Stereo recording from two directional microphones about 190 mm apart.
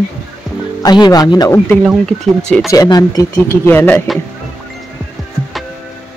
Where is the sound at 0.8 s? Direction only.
20° left (ahead or behind).